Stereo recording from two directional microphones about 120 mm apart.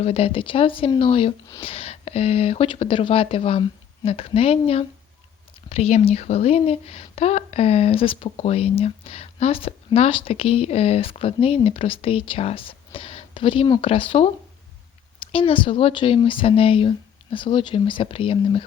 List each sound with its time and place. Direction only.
0.0 s speech: 55° left (ahead or behind)